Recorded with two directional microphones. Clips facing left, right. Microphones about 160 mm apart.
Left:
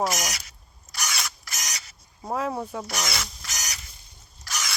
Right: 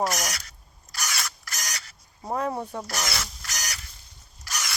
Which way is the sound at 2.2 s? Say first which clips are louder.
Even; centre (ahead or behind).